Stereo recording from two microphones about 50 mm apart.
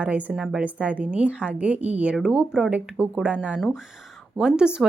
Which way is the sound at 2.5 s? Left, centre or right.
Centre.